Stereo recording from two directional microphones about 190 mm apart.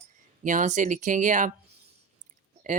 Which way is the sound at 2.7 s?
40° right (ahead or behind).